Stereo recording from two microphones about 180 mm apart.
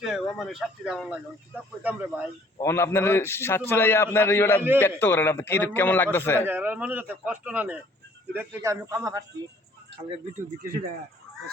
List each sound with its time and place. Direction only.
0.0 s speech: centre (ahead or behind)
2.6 s a man's voice: 15° left (ahead or behind)
6.4 s speech: 10° right (ahead or behind)